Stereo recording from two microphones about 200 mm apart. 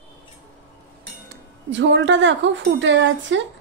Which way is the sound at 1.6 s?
65° right (ahead or behind).